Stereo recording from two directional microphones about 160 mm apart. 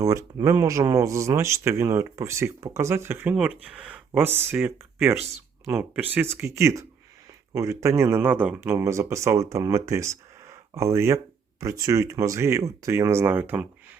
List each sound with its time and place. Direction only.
0.0 s speech: 20° right (ahead or behind)